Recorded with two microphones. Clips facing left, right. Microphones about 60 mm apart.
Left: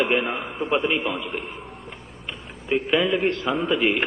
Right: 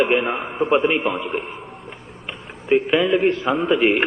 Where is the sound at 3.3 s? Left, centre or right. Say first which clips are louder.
Right 4 dB; centre.